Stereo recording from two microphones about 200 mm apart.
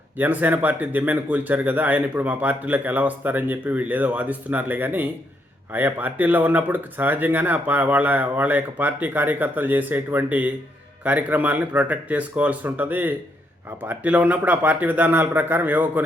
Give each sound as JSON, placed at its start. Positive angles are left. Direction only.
{"t": 0.2, "sound": "speech", "side_deg": -10}